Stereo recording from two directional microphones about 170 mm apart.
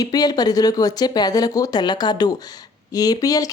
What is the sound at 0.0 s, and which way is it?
Speech, 25° left (ahead or behind).